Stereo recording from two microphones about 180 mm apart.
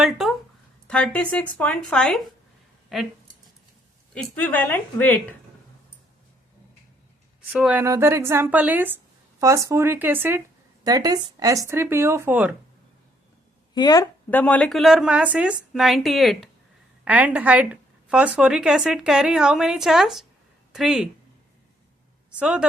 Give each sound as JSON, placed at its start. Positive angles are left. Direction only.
{"t": 0.0, "sound": "a sound", "side_deg": 0}
{"t": 0.9, "sound": "a woman's voice", "side_deg": 5}
{"t": 4.1, "sound": "speech", "side_deg": 5}
{"t": 7.5, "sound": "speech", "side_deg": -5}
{"t": 13.7, "sound": "a woman's voice", "side_deg": 20}
{"t": 14.3, "sound": "a woman's voice", "side_deg": 10}
{"t": 22.4, "sound": "a woman's voice", "side_deg": -5}